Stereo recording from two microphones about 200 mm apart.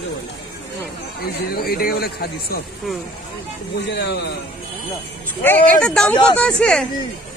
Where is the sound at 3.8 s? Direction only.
60° left (ahead or behind).